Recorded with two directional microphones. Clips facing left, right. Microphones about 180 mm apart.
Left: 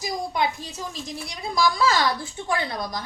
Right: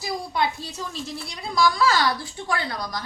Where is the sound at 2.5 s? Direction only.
25° left (ahead or behind).